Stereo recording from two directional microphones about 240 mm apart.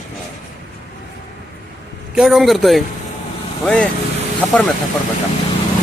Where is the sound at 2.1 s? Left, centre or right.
Centre.